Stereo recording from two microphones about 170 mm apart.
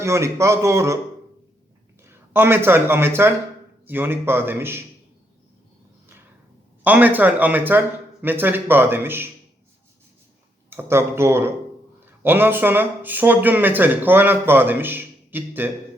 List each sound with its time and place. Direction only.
0.0 s speech: 15° right (ahead or behind)
2.0 s speech: 15° right (ahead or behind)
6.8 s speech: 10° right (ahead or behind)
10.7 s speech: 15° right (ahead or behind)